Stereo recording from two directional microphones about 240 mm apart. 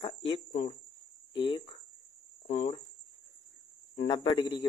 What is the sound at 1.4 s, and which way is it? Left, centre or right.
Speech, left.